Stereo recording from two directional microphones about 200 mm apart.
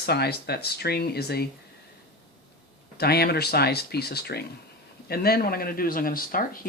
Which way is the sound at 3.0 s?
50° left (ahead or behind).